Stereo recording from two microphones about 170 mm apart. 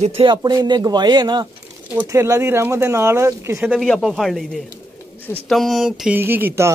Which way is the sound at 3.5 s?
5° right (ahead or behind).